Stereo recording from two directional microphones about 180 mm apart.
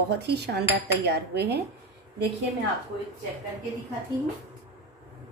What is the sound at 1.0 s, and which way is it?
Dishes, 65° right (ahead or behind).